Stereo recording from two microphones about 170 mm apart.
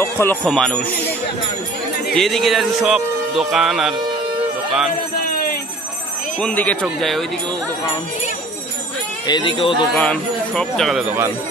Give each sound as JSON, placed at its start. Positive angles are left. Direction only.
{"t": 0.0, "sound": "jingle bell", "side_deg": 15}
{"t": 0.5, "sound": "speech", "side_deg": 5}
{"t": 2.1, "sound": "speech", "side_deg": 0}
{"t": 6.4, "sound": "speech", "side_deg": 10}
{"t": 9.3, "sound": "speech", "side_deg": 30}
{"t": 9.8, "sound": "speech", "side_deg": 5}